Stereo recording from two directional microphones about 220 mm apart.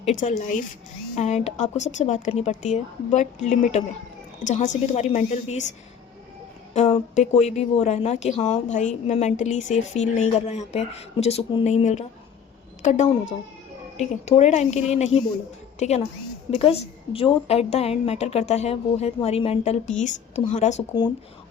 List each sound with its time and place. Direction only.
0.0 s a woman's voice: 35° left (ahead or behind)
6.7 s a woman's voice: 30° left (ahead or behind)